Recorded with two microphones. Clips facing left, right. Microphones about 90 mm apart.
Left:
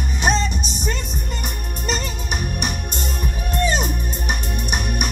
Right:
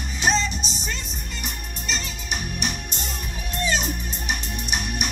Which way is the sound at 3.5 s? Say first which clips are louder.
Left 4 dB; 50° left (ahead or behind).